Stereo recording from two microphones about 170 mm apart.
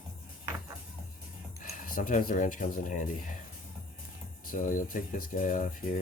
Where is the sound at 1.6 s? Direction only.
55° left (ahead or behind).